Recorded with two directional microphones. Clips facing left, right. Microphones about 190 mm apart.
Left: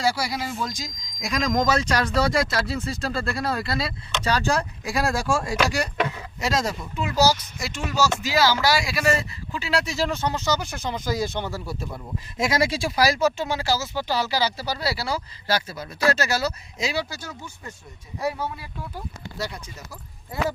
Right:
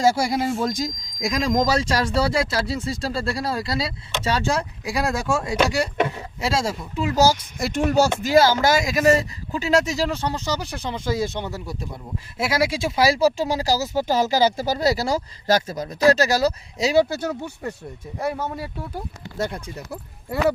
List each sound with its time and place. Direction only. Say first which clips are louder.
0.0 s speech: right 6 dB; 45° right (ahead or behind)
1.2 s speech: right 2 dB; 30° right (ahead or behind)
7.2 s speech: right 2 dB; 50° right (ahead or behind); by 11.9 s 20° right (ahead or behind)
12.4 s speech: right 1 dB; 10° right (ahead or behind)
12.8 s speech: right 5 dB; 25° right (ahead or behind); by 17.7 s 65° right (ahead or behind)
18.2 s speech: right 2 dB; 50° right (ahead or behind)